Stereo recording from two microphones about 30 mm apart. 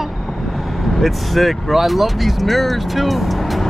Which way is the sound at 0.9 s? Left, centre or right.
Centre.